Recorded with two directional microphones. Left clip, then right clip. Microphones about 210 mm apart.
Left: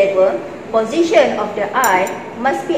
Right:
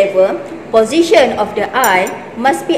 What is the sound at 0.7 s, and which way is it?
A woman's voice, 55° right (ahead or behind).